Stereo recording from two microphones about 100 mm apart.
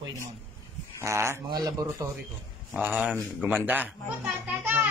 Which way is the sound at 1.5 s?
40° right (ahead or behind).